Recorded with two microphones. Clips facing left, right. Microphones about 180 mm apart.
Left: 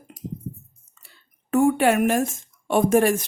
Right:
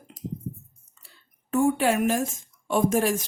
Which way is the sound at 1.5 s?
60° left (ahead or behind).